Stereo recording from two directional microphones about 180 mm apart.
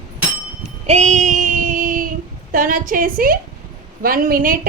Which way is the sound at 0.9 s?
40° right (ahead or behind).